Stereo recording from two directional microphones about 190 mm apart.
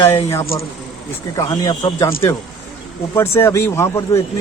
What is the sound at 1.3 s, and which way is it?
Speech, 20° left (ahead or behind).